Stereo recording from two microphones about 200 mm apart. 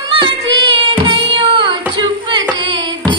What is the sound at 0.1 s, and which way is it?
Child singing, 25° right (ahead or behind).